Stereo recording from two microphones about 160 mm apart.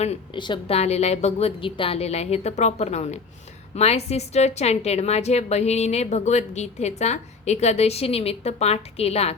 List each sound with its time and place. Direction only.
0.3 s a woman's voice: 30° left (ahead or behind)
0.8 s a woman's voice: 40° left (ahead or behind)